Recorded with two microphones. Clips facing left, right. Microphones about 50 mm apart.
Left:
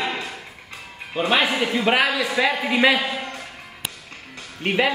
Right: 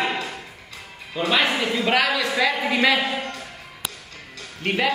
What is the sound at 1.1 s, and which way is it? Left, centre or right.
A man's voice, left.